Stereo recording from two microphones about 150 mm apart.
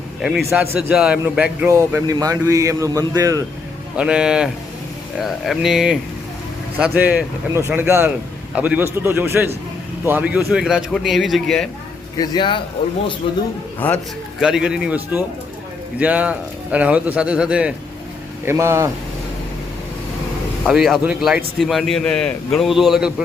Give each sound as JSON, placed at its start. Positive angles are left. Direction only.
{"t": 0.2, "sound": "a man's voice", "side_deg": 0}
{"t": 3.9, "sound": "a man's voice", "side_deg": -5}
{"t": 12.1, "sound": "a man's voice", "side_deg": 25}
{"t": 13.7, "sound": "a man's voice", "side_deg": 10}
{"t": 14.4, "sound": "a man's voice", "side_deg": -5}
{"t": 18.4, "sound": "a man's voice", "side_deg": -20}
{"t": 20.7, "sound": "a man's voice", "side_deg": -5}